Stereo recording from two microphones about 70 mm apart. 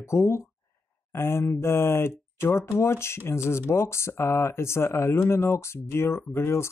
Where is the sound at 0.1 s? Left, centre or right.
Left.